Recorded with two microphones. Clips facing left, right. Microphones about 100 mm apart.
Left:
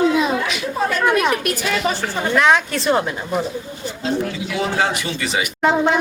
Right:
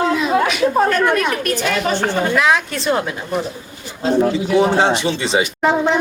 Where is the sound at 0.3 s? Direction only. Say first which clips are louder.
Right 7 dB; 50° right (ahead or behind).